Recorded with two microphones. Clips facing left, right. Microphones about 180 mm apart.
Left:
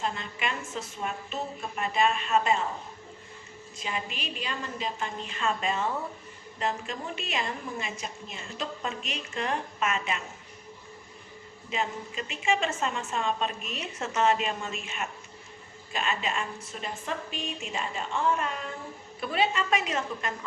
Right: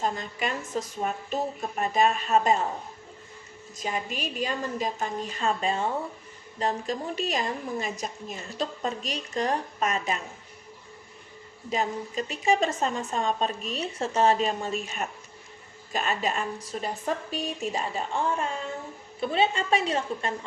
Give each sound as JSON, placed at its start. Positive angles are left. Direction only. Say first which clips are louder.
{"t": 0.0, "sound": "a woman's voice", "louder": "right 3 dB", "side_deg": -40}
{"t": 3.8, "sound": "a woman's voice", "louder": "right 4 dB", "side_deg": -45}
{"t": 11.7, "sound": "a woman's voice", "louder": "right 4 dB", "side_deg": -40}